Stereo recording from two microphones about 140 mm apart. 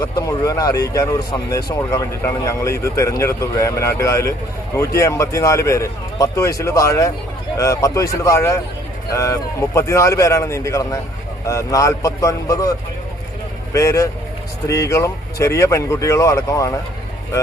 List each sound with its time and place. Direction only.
0.0 s speech: 25° left (ahead or behind)
13.7 s speech: 20° left (ahead or behind)